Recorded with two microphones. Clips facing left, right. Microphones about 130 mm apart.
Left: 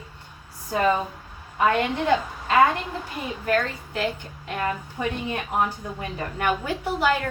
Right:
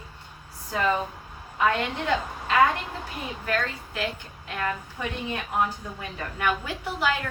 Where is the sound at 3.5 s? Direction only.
35° left (ahead or behind).